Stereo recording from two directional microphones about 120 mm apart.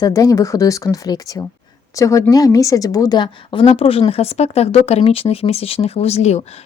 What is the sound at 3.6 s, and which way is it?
Speech, 55° left (ahead or behind).